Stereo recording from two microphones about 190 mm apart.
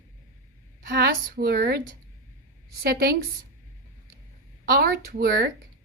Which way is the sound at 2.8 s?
55° right (ahead or behind).